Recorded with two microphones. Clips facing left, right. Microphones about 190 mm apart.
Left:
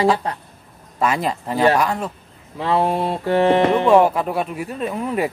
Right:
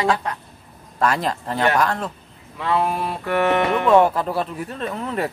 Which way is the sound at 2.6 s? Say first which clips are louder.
Left 3 dB; 30° left (ahead or behind).